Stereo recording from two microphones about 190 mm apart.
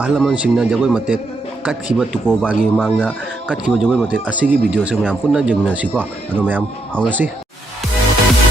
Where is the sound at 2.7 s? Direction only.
10° left (ahead or behind).